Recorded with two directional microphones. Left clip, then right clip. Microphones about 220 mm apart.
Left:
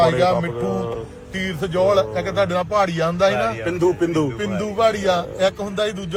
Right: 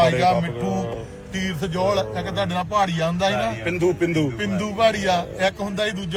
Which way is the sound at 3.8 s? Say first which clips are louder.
Left 3 dB; 50° left (ahead or behind).